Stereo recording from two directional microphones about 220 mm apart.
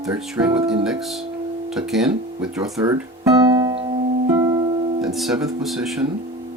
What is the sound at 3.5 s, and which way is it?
Music, 15° right (ahead or behind).